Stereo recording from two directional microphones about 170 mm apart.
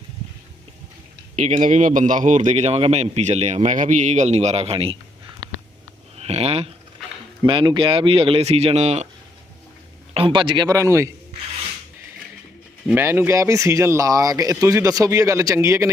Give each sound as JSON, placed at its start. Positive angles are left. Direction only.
{"t": 1.4, "sound": "a man's voice", "side_deg": -45}
{"t": 6.1, "sound": "speech", "side_deg": -35}
{"t": 10.2, "sound": "speech", "side_deg": -30}
{"t": 12.9, "sound": "speech", "side_deg": -15}